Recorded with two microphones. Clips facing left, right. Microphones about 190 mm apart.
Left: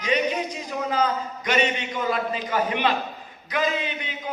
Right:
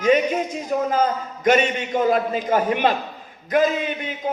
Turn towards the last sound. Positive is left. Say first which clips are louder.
# right 5 dB
turn(degrees=-50)  # may be behind; listen again after turning